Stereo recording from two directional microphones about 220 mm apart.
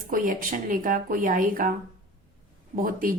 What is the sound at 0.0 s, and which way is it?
Speech, 40° right (ahead or behind).